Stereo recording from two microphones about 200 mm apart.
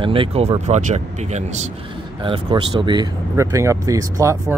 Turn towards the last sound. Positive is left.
turn(degrees=-15)  # may be behind; listen again after turning